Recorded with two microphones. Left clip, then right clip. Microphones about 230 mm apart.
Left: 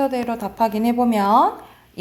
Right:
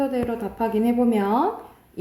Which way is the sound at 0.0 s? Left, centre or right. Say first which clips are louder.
Left 3 dB; left.